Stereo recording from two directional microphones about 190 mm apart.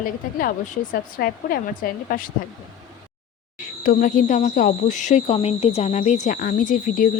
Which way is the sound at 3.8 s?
45° left (ahead or behind).